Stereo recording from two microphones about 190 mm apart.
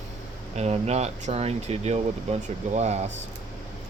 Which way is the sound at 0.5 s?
35° right (ahead or behind).